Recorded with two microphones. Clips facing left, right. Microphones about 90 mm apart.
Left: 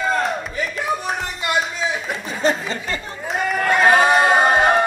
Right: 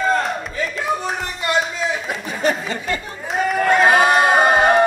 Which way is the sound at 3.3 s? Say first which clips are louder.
Right 3 dB; centre (ahead or behind).